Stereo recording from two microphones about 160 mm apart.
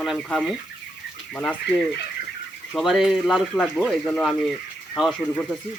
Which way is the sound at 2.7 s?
Centre (ahead or behind).